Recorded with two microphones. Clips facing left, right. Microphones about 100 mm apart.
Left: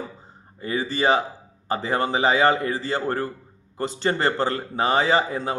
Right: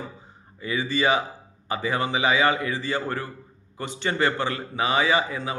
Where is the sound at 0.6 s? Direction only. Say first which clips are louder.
Left 1 dB; 40° left (ahead or behind).